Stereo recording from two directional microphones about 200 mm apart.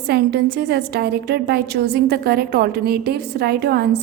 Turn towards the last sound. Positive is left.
turn(degrees=-55)  # may be behind; listen again after turning